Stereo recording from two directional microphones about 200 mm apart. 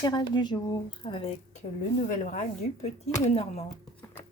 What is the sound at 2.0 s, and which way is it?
Speech, 40° left (ahead or behind).